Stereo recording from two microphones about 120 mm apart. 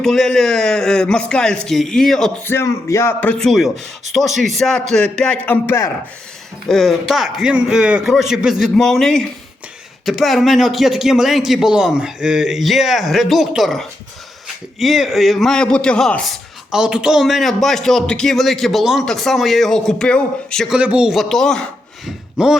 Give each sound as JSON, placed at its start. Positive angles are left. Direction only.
{"t": 0.0, "sound": "a man's voice", "side_deg": 5}
{"t": 2.4, "sound": "a man's voice", "side_deg": 20}
{"t": 5.6, "sound": "speech", "side_deg": 25}
{"t": 6.7, "sound": "a man's voice", "side_deg": 5}
{"t": 20.7, "sound": "a man's voice", "side_deg": -10}